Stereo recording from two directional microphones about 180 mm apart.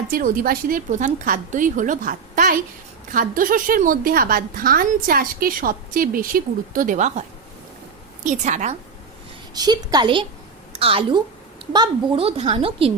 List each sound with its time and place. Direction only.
0.1 s a woman's voice: 50° right (ahead or behind)
9.6 s a woman's voice: 20° right (ahead or behind)